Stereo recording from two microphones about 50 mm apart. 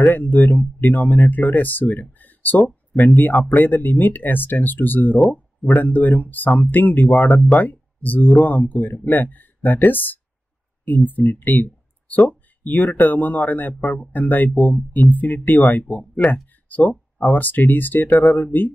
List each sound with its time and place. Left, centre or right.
0.1 s speech: left
16.6 s a sound: left
17.2 s speech: left